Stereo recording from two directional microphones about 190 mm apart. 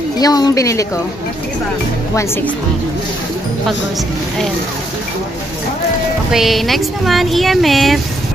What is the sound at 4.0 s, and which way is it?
Speech, centre (ahead or behind).